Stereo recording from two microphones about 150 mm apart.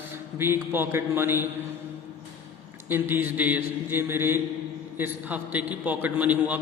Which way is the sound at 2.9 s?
15° right (ahead or behind).